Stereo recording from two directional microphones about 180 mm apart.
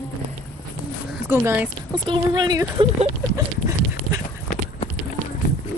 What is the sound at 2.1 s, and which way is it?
Speech, 25° right (ahead or behind).